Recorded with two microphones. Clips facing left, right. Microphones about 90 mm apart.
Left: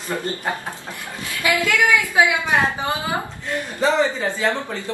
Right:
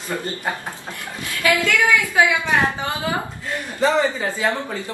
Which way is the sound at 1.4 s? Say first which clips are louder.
Right 1 dB; 20° left (ahead or behind).